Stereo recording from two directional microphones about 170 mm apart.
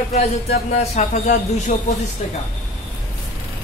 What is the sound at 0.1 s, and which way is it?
A man's voice, 40° left (ahead or behind).